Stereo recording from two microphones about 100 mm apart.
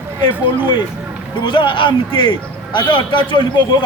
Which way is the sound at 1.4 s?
55° left (ahead or behind).